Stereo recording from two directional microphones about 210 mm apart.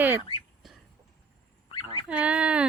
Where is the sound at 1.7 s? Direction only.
25° left (ahead or behind).